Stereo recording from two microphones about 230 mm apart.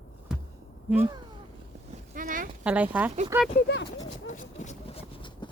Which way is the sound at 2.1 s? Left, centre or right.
Right.